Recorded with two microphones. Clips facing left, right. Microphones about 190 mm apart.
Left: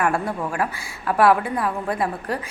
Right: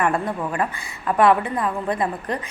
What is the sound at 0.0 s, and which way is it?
A woman's voice, 5° left (ahead or behind).